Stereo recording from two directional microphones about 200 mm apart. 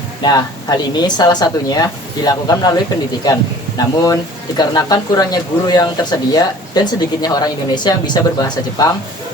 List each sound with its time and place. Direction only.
0.2 s speech: 20° left (ahead or behind)
3.8 s speech: 20° left (ahead or behind)